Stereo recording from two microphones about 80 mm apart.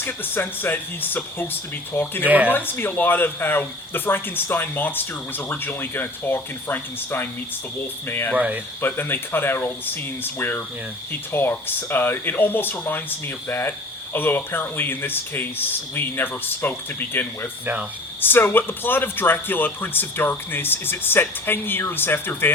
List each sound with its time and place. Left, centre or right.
0.0 s speech: left
2.2 s speech: centre
2.5 s speech: left
8.4 s speech: centre
8.8 s speech: left